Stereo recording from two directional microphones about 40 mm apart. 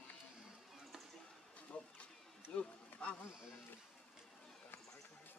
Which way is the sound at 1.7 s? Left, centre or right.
Left.